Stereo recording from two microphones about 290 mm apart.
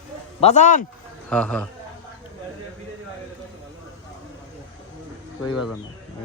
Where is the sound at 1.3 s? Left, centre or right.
Centre.